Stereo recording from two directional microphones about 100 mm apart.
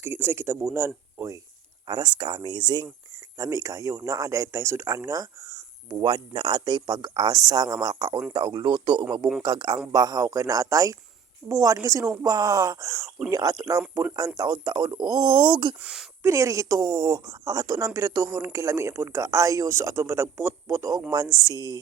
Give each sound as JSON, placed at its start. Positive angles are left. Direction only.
{"t": 0.0, "sound": "speech", "side_deg": -20}
{"t": 1.9, "sound": "speech", "side_deg": -45}
{"t": 3.3, "sound": "speech", "side_deg": -35}
{"t": 5.9, "sound": "speech", "side_deg": -50}
{"t": 15.8, "sound": "speech", "side_deg": -5}
{"t": 16.2, "sound": "speech", "side_deg": -30}